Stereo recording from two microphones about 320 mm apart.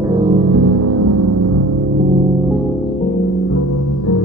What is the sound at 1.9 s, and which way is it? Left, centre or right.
Music, right.